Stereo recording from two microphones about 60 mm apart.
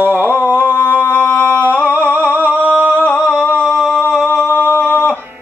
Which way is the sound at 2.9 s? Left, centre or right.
Left.